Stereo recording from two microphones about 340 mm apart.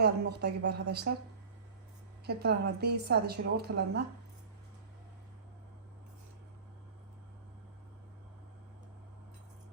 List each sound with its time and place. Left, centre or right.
0.0 s a woman's voice: right
2.2 s a woman's voice: right